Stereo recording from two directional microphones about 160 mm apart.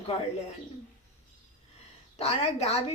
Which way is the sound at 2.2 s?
40° left (ahead or behind).